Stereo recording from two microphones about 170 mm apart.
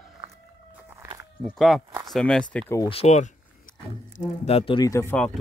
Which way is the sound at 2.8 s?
35° left (ahead or behind).